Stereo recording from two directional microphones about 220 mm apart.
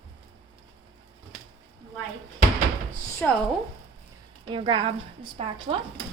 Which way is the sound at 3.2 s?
5° left (ahead or behind).